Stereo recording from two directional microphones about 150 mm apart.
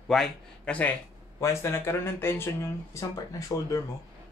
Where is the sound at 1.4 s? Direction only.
20° left (ahead or behind).